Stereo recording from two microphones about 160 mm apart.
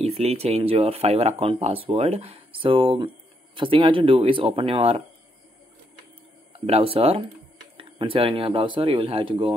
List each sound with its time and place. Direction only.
0.0 s speech: 40° right (ahead or behind)
6.6 s speech: 35° right (ahead or behind)